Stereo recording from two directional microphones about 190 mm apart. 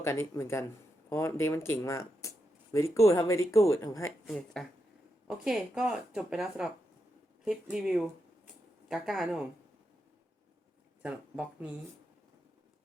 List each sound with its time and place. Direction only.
0.0 s speech: 15° left (ahead or behind)
4.3 s speech: 5° left (ahead or behind)
11.0 s speech: 5° right (ahead or behind)